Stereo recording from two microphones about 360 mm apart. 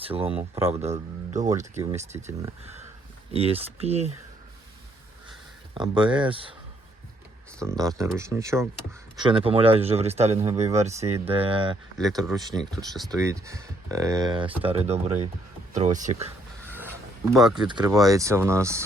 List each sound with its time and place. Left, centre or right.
0.0 s speech: centre
3.3 s speech: centre
5.7 s speech: centre
7.6 s speech: centre
16.6 s a sound: centre
17.6 s speech: centre